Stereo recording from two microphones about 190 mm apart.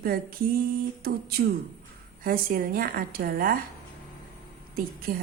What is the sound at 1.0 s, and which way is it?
A woman's voice, 55° right (ahead or behind).